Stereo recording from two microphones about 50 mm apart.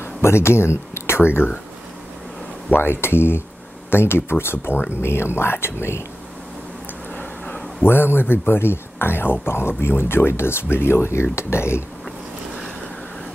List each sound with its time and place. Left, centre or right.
0.0 s speech: left
2.7 s speech: left
7.2 s a sound: left
7.8 s speech: left